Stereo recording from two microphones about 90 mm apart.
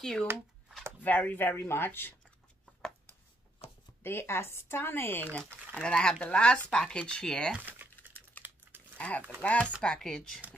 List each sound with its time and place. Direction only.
0.0 s speech: 5° left (ahead or behind)
1.0 s speech: 20° left (ahead or behind)
4.0 s speech: 25° left (ahead or behind)
5.8 s speech: 10° left (ahead or behind)
7.5 s crumpling: 20° right (ahead or behind)
8.4 s typing: 20° left (ahead or behind)
8.9 s a sound: 15° left (ahead or behind)
9.4 s speech: 15° left (ahead or behind)